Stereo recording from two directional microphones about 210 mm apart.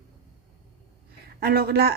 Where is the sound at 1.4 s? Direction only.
45° right (ahead or behind).